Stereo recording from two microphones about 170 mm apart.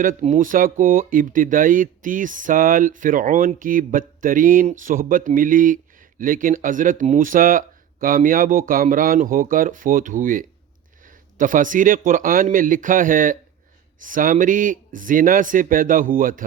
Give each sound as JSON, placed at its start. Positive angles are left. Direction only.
{"t": 0.0, "sound": "speech", "side_deg": -50}